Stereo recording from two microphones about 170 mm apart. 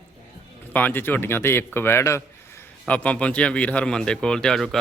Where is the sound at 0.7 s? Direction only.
10° left (ahead or behind).